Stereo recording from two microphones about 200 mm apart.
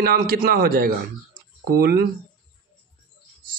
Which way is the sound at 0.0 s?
45° right (ahead or behind).